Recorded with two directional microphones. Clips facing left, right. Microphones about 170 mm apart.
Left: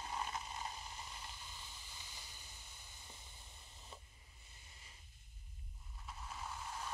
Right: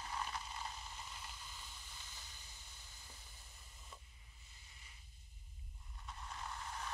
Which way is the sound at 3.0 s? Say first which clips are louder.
Left 2 dB; 20° left (ahead or behind).